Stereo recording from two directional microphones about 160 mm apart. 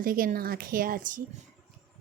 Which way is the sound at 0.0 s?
60° right (ahead or behind).